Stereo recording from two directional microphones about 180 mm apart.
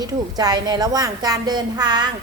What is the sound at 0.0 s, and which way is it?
A woman's voice, 20° right (ahead or behind).